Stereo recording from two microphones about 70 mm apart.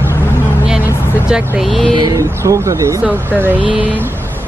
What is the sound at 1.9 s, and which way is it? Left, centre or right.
Speech, right.